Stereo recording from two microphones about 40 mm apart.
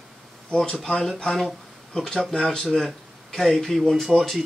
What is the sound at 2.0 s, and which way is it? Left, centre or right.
Speech, centre.